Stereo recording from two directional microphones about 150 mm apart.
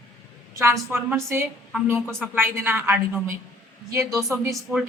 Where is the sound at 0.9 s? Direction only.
15° right (ahead or behind).